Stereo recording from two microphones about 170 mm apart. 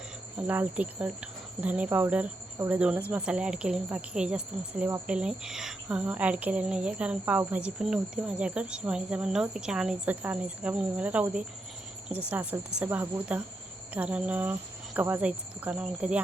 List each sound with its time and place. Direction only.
0.3 s cricket: 10° right (ahead or behind)
5.0 s speech: 5° right (ahead or behind)
12.3 s cricket: 10° right (ahead or behind)